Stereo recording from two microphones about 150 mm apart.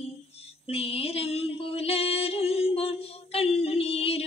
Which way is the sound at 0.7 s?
40° left (ahead or behind).